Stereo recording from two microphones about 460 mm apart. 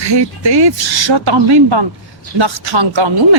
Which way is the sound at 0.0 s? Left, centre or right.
Right.